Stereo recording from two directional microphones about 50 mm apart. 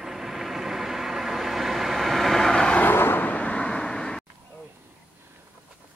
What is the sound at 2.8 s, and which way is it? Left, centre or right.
Vehicle, left.